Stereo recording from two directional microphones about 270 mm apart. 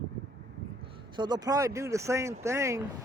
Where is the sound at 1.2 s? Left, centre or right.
Centre.